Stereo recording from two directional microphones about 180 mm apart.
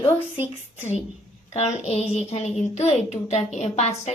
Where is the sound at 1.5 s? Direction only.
35° left (ahead or behind).